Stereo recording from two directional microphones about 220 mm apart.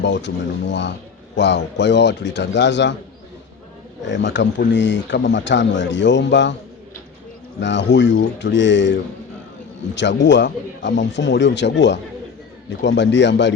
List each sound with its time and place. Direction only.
0.0 s a man's voice: 55° left (ahead or behind)
4.0 s speech: 55° left (ahead or behind)
7.6 s a man's voice: 55° left (ahead or behind)